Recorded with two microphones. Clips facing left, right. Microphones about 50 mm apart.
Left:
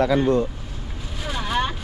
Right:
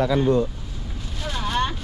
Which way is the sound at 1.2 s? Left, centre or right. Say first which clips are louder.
Even; centre.